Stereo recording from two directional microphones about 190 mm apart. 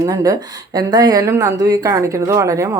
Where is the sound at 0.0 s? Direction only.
20° right (ahead or behind).